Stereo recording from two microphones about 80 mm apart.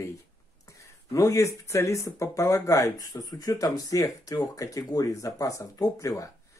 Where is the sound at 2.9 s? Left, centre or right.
Left.